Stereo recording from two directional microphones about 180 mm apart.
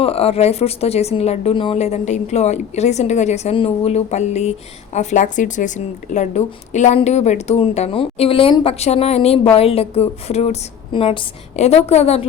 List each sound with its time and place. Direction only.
0.0 s a woman's voice: 35° left (ahead or behind)